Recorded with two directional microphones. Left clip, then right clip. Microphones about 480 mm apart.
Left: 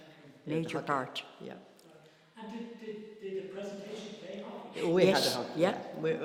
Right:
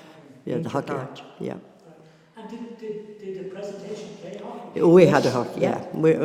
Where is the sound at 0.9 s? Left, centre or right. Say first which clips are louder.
Right 2 dB; left.